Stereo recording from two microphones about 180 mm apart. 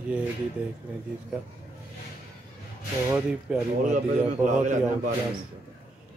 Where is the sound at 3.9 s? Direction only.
45° right (ahead or behind).